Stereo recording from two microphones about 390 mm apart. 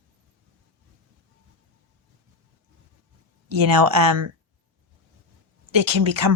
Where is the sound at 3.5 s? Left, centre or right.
Right.